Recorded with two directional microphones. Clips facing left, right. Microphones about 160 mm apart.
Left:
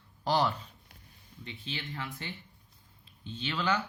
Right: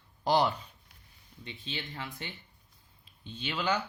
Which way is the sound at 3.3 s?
15° right (ahead or behind).